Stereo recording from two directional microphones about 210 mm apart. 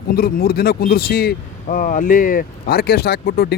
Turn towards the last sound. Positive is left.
turn(degrees=50)  # may be behind; listen again after turning